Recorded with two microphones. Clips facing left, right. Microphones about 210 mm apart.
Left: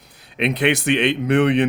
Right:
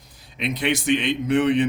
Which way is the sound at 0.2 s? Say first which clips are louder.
Left 6 dB; 65° left (ahead or behind).